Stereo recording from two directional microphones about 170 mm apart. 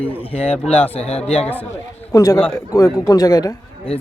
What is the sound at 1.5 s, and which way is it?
A man's voice, 15° left (ahead or behind).